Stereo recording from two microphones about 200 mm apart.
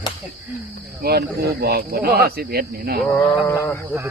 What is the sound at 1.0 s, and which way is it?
Speech, 50° right (ahead or behind).